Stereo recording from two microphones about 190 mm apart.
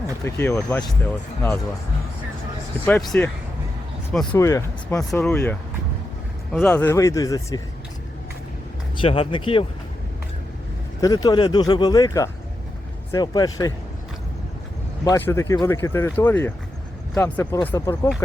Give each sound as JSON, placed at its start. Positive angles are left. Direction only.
{"t": 0.3, "sound": "speech", "side_deg": 15}
{"t": 2.8, "sound": "speech", "side_deg": 5}
{"t": 4.4, "sound": "speech", "side_deg": 15}
{"t": 9.0, "sound": "speech", "side_deg": 30}
{"t": 11.0, "sound": "speech", "side_deg": 20}
{"t": 15.0, "sound": "speech", "side_deg": 15}